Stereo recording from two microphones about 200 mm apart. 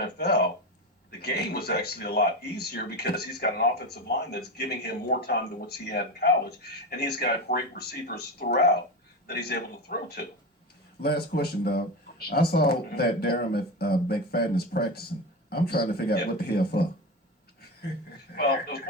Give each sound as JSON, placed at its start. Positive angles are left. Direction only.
{"t": 1.2, "sound": "speech", "side_deg": 55}
{"t": 18.3, "sound": "speech", "side_deg": 50}